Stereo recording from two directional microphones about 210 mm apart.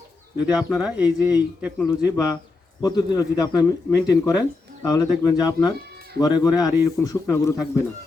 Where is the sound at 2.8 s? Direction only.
20° left (ahead or behind).